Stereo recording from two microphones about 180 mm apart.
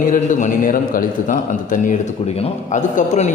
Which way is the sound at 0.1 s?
45° left (ahead or behind).